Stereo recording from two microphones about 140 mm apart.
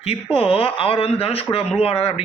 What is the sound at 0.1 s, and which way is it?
Speech, 45° left (ahead or behind).